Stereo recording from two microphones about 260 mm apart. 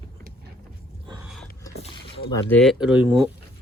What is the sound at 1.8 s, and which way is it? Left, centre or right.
Rowboat, left.